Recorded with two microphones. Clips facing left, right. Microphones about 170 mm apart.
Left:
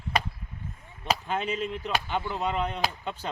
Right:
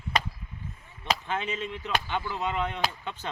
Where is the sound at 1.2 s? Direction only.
40° left (ahead or behind).